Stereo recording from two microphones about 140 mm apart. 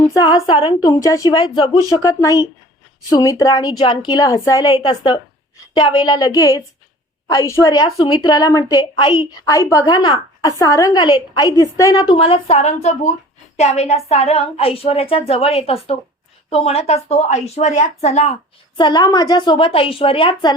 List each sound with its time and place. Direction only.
0.1 s a woman's voice: 25° left (ahead or behind)
1.0 s a woman's voice: 25° left (ahead or behind)
12.1 s speech: 40° left (ahead or behind)
18.8 s a woman's voice: 30° left (ahead or behind)